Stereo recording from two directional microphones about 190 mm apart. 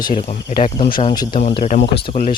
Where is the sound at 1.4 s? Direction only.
35° left (ahead or behind).